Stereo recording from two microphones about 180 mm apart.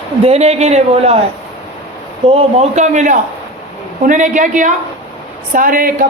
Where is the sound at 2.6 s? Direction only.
40° right (ahead or behind).